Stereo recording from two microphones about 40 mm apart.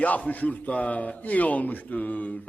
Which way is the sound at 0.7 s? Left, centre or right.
Left.